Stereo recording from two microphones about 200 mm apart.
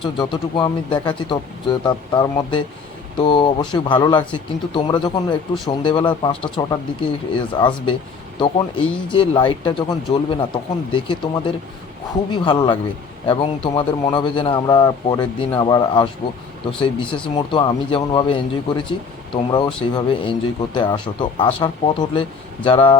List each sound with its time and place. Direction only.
0.0 s speech: 25° left (ahead or behind)